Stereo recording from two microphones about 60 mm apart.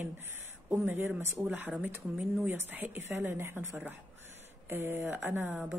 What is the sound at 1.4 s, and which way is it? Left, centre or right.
Speech, right.